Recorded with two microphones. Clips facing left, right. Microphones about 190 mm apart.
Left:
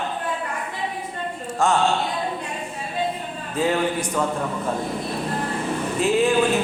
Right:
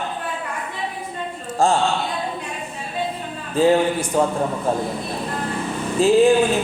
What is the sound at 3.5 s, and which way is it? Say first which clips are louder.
Speech: right 5 dB; 30° right (ahead or behind).